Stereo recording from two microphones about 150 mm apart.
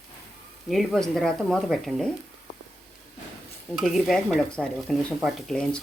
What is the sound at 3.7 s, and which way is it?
Stir, centre (ahead or behind).